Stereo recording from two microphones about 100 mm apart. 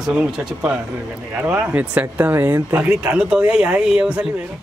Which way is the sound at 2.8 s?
10° right (ahead or behind).